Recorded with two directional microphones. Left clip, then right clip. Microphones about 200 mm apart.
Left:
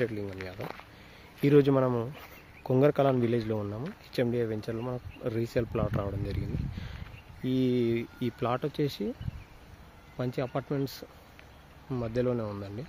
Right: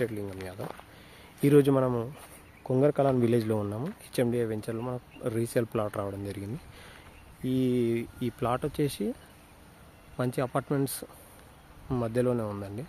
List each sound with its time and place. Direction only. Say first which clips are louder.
0.0 s speech: even; centre (ahead or behind)
3.3 s speech: right 3 dB; 15° right (ahead or behind)
10.1 s speech: right 3 dB; 15° right (ahead or behind)